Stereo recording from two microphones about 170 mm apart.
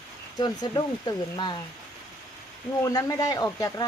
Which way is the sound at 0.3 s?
25° left (ahead or behind).